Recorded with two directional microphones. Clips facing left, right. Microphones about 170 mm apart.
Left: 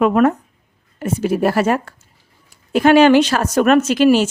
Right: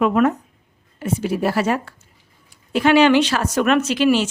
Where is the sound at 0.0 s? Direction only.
50° left (ahead or behind).